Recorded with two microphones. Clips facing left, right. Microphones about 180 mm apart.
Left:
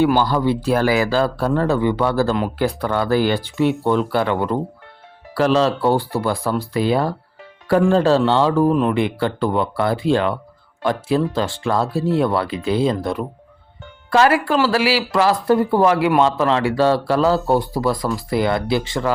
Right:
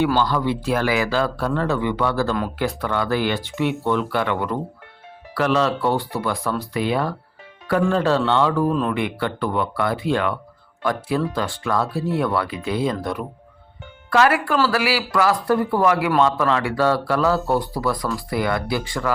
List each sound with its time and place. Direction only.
0.2 s speech: 35° left (ahead or behind)